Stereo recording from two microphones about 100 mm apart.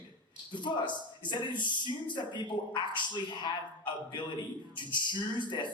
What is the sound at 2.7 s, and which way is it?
A man's voice, 50° left (ahead or behind).